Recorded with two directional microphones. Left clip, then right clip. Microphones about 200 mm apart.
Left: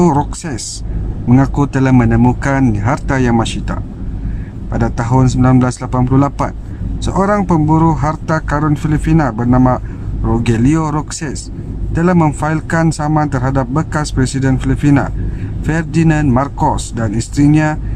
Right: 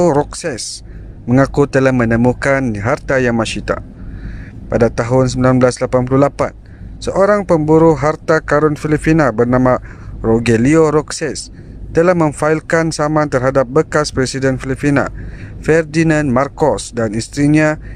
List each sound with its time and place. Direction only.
0.0 s speech: 30° right (ahead or behind)